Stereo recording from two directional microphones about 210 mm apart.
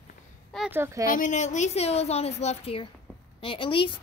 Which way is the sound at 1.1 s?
35° left (ahead or behind).